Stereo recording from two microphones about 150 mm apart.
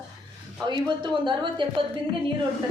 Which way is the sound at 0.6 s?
30° right (ahead or behind).